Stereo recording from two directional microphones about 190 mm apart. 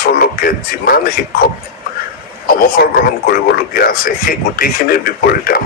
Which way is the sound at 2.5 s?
50° left (ahead or behind).